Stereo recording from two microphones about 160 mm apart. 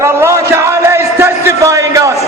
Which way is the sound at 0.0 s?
15° right (ahead or behind).